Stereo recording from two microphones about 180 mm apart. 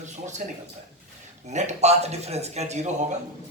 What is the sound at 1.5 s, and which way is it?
Speech, 40° right (ahead or behind).